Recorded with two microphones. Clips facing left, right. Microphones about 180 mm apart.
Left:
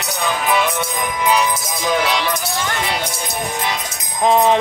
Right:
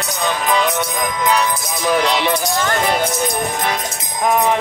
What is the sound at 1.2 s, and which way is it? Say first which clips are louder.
Music: left 1 dB; 15° left (ahead or behind).